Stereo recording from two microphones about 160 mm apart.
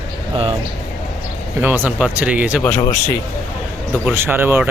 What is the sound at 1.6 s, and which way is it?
Speech, 10° right (ahead or behind).